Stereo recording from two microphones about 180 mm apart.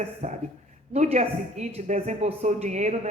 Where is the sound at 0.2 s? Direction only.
40° right (ahead or behind).